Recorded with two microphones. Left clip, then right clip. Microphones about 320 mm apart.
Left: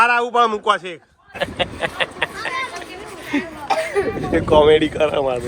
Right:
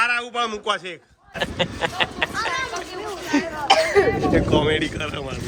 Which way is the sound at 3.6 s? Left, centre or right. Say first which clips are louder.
Right 4 dB; right.